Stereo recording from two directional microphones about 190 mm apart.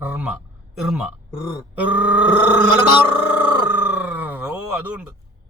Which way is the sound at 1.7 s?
10° right (ahead or behind).